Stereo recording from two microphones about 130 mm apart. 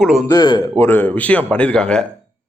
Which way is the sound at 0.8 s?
15° left (ahead or behind).